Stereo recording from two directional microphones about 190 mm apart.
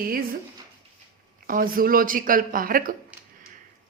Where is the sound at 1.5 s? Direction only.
50° right (ahead or behind).